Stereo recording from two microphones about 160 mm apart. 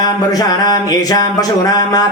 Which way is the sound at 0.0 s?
25° left (ahead or behind).